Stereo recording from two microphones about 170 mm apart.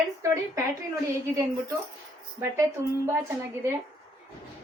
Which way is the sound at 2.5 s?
15° right (ahead or behind).